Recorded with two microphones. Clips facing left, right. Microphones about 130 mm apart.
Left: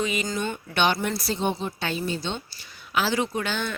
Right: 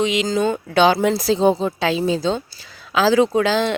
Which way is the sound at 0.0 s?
90° right.